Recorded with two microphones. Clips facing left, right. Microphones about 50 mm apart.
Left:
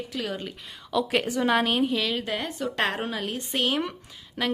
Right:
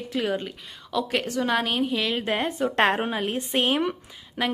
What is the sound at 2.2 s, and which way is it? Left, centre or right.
A woman's voice, right.